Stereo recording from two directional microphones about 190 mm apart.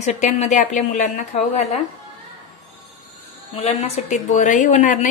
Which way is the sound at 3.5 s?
35° left (ahead or behind).